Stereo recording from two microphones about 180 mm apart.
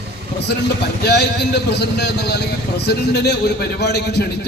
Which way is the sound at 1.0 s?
70° left (ahead or behind).